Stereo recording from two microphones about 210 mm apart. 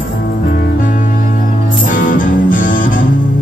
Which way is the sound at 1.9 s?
40° left (ahead or behind).